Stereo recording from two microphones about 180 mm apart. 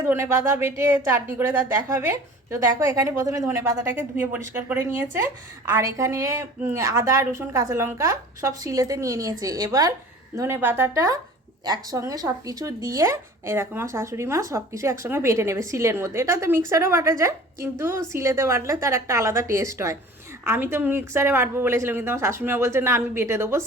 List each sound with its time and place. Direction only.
0.0 s a woman's voice: 15° right (ahead or behind)